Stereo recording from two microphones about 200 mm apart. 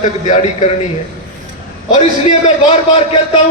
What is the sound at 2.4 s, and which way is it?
Speech, 30° left (ahead or behind).